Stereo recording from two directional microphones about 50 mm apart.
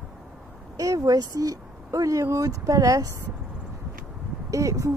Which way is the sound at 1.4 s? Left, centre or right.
Right.